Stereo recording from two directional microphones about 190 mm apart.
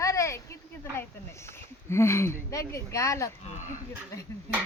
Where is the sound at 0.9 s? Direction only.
15° left (ahead or behind).